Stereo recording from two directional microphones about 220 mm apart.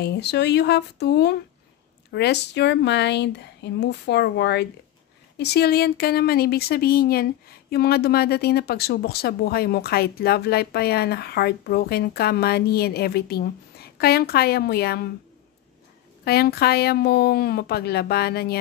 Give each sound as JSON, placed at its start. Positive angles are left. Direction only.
{"t": 0.0, "sound": "speech", "side_deg": 50}
{"t": 16.3, "sound": "speech", "side_deg": 45}